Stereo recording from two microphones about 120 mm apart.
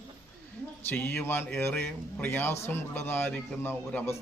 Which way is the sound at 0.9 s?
20° left (ahead or behind).